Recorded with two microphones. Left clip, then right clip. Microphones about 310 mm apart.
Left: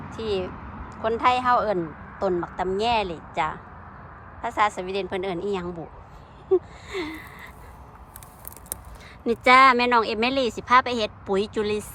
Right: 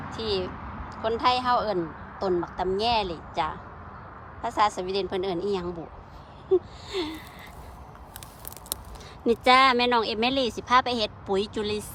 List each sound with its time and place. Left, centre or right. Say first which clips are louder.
0.1 s a woman's voice: left 2 dB; centre
9.2 s speech: left 3 dB; centre